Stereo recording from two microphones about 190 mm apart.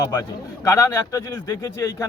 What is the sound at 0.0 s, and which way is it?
A man's voice, 15° left (ahead or behind).